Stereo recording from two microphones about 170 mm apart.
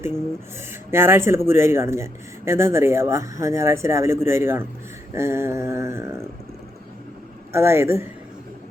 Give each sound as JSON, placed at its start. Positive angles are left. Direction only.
{"t": 0.7, "sound": "speech", "side_deg": -15}
{"t": 7.5, "sound": "speech", "side_deg": -15}